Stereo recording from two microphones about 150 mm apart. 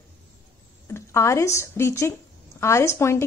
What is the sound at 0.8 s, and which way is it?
Speech, 20° left (ahead or behind).